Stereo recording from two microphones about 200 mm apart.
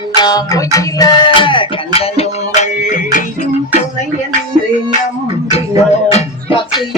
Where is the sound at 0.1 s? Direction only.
20° left (ahead or behind).